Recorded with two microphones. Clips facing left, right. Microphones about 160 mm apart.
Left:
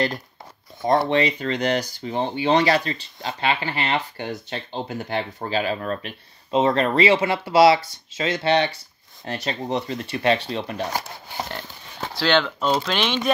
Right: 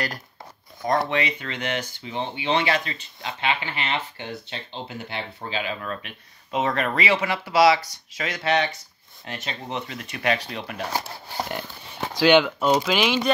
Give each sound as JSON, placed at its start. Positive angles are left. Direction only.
{"t": 0.8, "sound": "speech", "side_deg": 30}
{"t": 12.1, "sound": "speech", "side_deg": -15}